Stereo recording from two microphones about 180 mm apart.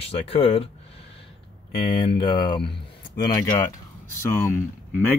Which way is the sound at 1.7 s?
30° left (ahead or behind).